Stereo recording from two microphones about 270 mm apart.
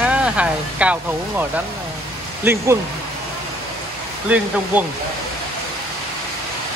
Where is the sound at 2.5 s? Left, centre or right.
Centre.